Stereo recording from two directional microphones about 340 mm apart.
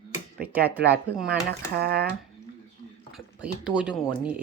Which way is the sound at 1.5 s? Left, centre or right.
Right.